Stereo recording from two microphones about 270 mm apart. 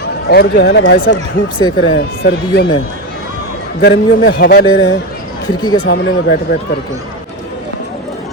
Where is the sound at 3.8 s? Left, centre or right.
Left.